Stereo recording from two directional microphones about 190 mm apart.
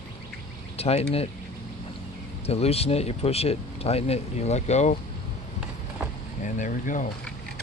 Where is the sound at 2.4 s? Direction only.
30° left (ahead or behind).